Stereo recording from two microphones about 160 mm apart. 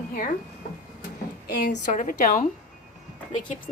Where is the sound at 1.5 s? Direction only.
75° left (ahead or behind).